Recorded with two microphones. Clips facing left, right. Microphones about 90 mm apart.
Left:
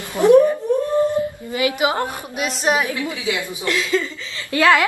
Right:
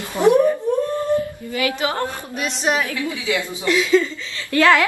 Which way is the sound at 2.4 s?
5° left (ahead or behind).